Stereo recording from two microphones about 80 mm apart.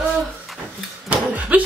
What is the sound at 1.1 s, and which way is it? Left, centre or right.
Cough, centre.